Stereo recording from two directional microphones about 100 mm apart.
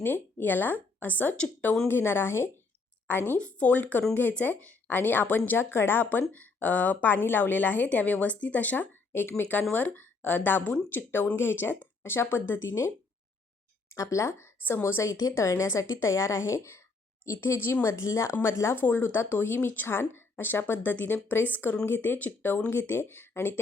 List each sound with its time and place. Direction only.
0.0 s a woman's voice: 20° left (ahead or behind)
13.9 s speech: 30° left (ahead or behind)